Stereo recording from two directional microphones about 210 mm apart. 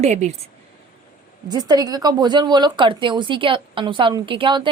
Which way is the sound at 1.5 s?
20° right (ahead or behind).